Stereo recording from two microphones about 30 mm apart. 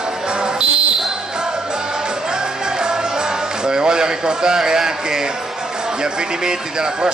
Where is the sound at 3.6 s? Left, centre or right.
Right.